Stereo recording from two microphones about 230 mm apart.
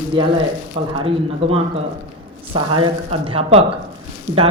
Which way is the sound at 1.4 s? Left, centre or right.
Right.